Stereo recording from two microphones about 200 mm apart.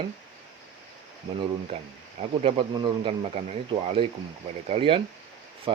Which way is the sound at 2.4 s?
25° right (ahead or behind).